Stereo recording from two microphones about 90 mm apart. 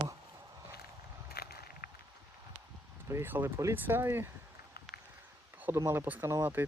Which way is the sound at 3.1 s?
25° right (ahead or behind).